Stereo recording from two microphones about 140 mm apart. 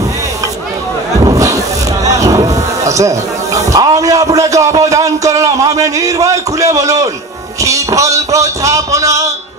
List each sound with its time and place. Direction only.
1.2 s music: 25° right (ahead or behind)
2.0 s speech: 25° right (ahead or behind)